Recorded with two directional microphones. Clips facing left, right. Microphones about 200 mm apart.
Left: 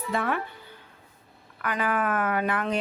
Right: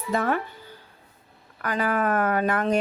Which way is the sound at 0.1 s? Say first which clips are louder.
Right 4 dB; 40° right (ahead or behind).